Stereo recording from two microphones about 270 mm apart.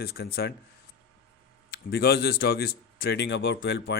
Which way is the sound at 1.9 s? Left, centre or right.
Left.